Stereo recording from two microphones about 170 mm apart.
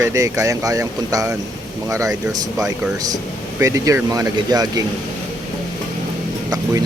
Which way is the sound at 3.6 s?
20° right (ahead or behind).